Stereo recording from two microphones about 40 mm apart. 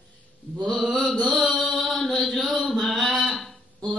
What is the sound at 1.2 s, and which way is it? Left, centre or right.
Mantra, centre.